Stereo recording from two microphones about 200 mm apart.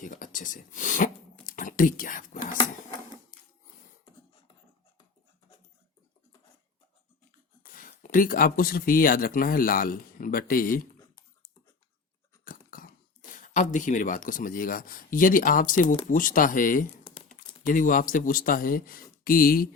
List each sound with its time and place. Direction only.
0.0 s a sound: 40° left (ahead or behind)
7.6 s speech: 45° left (ahead or behind)
12.5 s speech: 45° left (ahead or behind)